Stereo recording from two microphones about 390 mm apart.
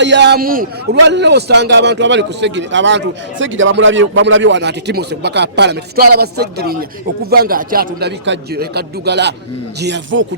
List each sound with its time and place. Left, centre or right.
0.0 s a man's voice: right